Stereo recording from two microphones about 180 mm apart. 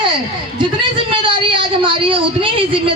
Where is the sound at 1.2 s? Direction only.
30° right (ahead or behind).